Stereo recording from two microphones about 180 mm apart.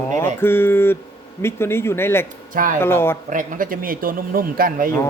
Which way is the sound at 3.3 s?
50° right (ahead or behind).